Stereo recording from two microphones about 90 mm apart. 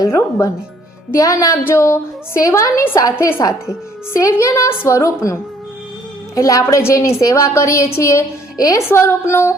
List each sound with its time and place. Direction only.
0.1 s a woman's voice: 30° left (ahead or behind)
6.3 s a woman's voice: 40° left (ahead or behind)
8.9 s a woman's voice: 30° left (ahead or behind)